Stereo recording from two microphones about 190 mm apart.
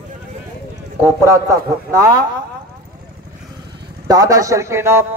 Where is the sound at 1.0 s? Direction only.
15° right (ahead or behind).